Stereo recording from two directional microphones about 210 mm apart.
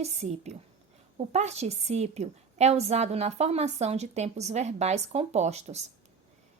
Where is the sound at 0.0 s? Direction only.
30° right (ahead or behind).